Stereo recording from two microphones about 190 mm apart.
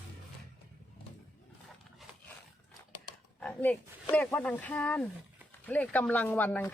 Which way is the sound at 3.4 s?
5° left (ahead or behind).